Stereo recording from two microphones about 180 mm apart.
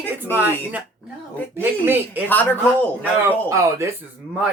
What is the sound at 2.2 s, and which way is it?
Speech, 10° left (ahead or behind).